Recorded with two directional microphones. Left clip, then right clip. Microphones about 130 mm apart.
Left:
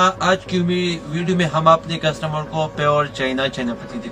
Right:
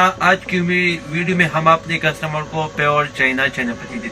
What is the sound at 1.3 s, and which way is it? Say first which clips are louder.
A man's voice: even; 20° left (ahead or behind).